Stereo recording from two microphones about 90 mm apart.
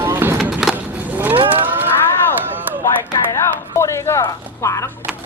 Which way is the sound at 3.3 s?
35° left (ahead or behind).